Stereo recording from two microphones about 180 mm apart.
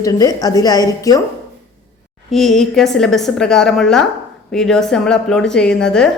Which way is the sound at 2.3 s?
Centre (ahead or behind).